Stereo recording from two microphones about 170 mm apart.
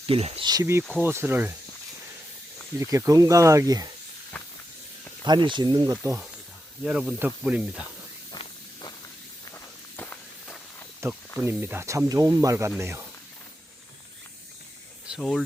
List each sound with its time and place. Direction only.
0.1 s speech: 35° right (ahead or behind)
0.4 s speech: 20° right (ahead or behind)
2.7 s speech: 20° right (ahead or behind)
5.2 s speech: 25° right (ahead or behind)
6.8 s speech: 5° right (ahead or behind)
8.3 s hiss: 25° left (ahead or behind)
11.0 s speech: 15° right (ahead or behind)
15.0 s speech: 5° right (ahead or behind)